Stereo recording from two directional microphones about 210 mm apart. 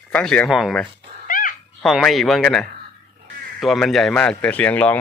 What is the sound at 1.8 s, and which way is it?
Speech, centre (ahead or behind).